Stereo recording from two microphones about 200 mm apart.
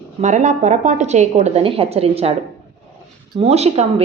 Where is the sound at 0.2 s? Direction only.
35° right (ahead or behind).